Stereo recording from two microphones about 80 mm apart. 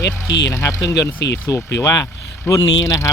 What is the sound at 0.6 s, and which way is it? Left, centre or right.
Speech, left.